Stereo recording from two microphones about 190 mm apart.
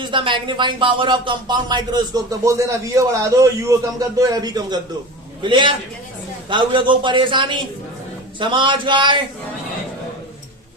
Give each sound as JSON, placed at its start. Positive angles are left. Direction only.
{"t": 0.0, "sound": "speech", "side_deg": -25}